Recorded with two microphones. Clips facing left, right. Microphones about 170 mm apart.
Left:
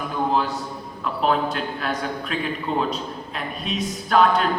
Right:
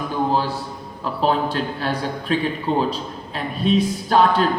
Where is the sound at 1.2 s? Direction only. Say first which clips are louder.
Right 2 dB; 30° right (ahead or behind).